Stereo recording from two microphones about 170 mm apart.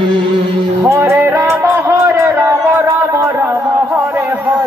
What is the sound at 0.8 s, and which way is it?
Music, 15° right (ahead or behind).